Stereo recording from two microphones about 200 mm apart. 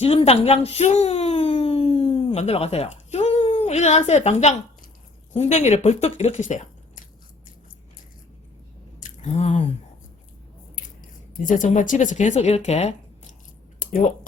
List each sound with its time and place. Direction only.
0.0 s speech: 30° left (ahead or behind)
9.0 s chewing: 35° left (ahead or behind)
11.4 s speech: 40° left (ahead or behind)